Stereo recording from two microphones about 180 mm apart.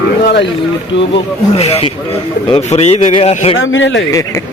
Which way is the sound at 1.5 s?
35° left (ahead or behind).